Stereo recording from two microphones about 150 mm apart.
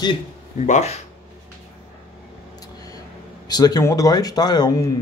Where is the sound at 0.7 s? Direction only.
50° left (ahead or behind).